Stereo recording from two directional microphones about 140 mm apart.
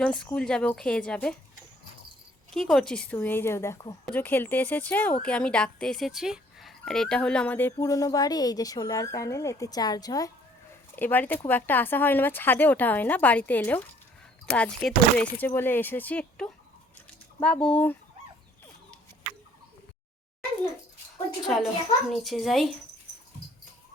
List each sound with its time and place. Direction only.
0.0 s a woman's voice: 5° left (ahead or behind)
2.5 s speech: centre (ahead or behind); by 10.3 s 25° left (ahead or behind)
10.9 s speech: 15° left (ahead or behind)
21.4 s a woman's voice: centre (ahead or behind)